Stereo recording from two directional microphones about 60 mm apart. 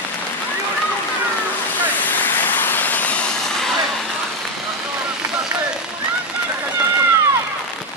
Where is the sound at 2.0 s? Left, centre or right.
Left.